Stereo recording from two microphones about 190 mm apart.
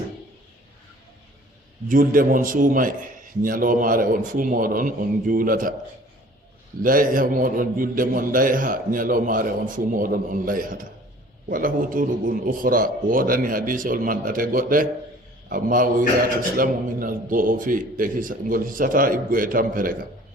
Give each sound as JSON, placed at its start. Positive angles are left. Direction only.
{"t": 1.9, "sound": "a man's voice", "side_deg": -45}
{"t": 6.8, "sound": "a man's voice", "side_deg": -45}